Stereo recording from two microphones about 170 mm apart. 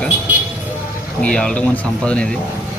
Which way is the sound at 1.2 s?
5° left (ahead or behind).